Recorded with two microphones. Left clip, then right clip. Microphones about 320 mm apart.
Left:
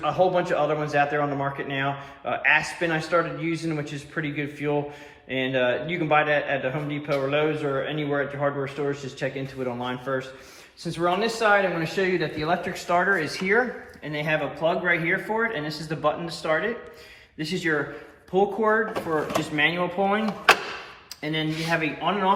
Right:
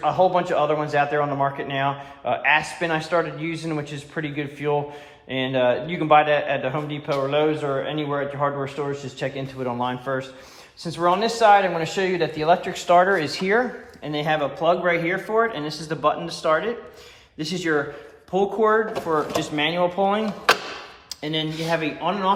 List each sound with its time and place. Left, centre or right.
0.0 s speech: right; by 20.2 s centre
21.2 s speech: centre